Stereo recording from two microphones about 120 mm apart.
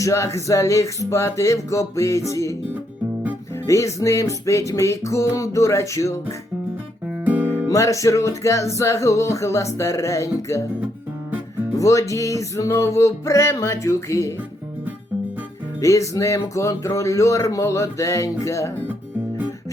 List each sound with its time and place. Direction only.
0.0 s music: 25° left (ahead or behind)
3.7 s music: 25° left (ahead or behind)
7.3 s music: 15° right (ahead or behind)
7.7 s music: 25° left (ahead or behind)
11.8 s music: 25° left (ahead or behind)
15.8 s music: 25° left (ahead or behind)